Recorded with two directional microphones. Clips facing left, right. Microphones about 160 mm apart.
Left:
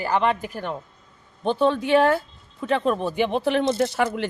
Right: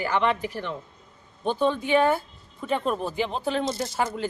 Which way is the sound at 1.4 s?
65° left (ahead or behind).